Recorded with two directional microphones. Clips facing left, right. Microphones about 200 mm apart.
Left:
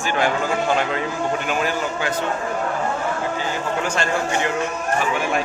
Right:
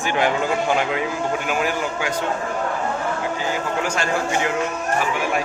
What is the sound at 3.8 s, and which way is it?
Speech, 10° right (ahead or behind).